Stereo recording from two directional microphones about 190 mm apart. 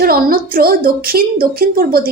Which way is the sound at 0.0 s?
50° right (ahead or behind).